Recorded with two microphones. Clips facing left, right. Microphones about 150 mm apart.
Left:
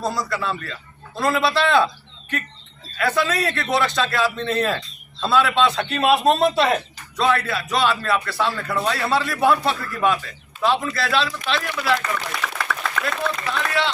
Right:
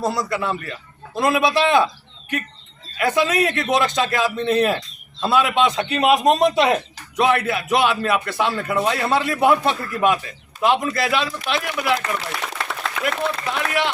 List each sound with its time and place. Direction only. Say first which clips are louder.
0.0 s a man's voice: right 2 dB; 20° right (ahead or behind)
3.0 s a man's voice: right 3 dB; 20° right (ahead or behind)